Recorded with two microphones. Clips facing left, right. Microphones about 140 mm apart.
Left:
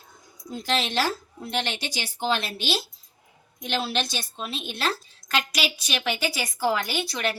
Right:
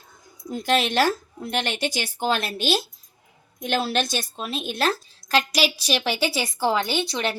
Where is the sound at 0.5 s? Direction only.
55° right (ahead or behind).